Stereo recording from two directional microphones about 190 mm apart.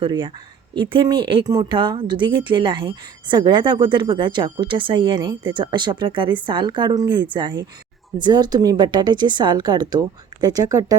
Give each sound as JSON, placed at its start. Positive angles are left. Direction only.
{"t": 0.0, "sound": "a woman's voice", "side_deg": -25}